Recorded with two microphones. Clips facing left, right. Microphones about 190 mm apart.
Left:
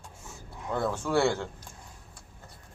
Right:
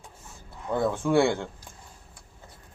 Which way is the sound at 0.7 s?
15° right (ahead or behind).